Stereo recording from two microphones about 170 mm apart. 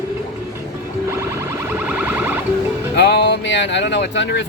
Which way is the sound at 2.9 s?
90° left.